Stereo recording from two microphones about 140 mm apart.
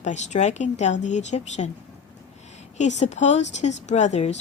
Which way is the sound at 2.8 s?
55° left (ahead or behind).